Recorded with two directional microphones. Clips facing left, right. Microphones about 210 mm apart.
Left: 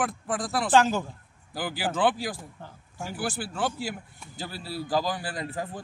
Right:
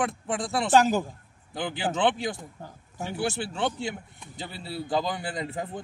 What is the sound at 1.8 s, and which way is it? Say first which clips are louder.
Speech: even; 20° right (ahead or behind).